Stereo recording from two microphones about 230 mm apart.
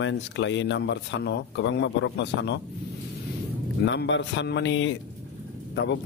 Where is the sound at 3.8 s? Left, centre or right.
Left.